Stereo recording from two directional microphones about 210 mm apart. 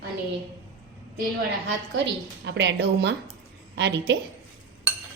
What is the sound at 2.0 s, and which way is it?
A woman's voice, 60° right (ahead or behind).